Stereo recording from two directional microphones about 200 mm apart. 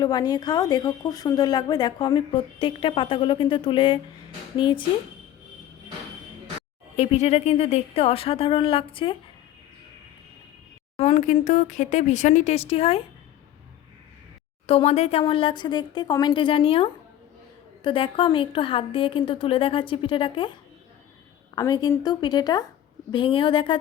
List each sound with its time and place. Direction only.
0.0 s speech: 20° left (ahead or behind)
6.9 s speech: 30° left (ahead or behind)
10.9 s speech: 30° left (ahead or behind)
14.7 s speech: 30° left (ahead or behind)